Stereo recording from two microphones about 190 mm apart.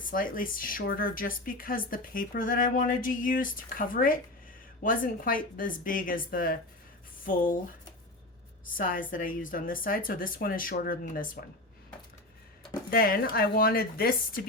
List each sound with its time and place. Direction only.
0.0 s speech: 45° left (ahead or behind)
8.6 s speech: 45° left (ahead or behind)
12.9 s speech: 50° left (ahead or behind)